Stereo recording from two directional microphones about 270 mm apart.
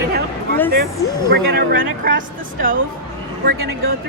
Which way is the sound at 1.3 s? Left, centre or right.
Right.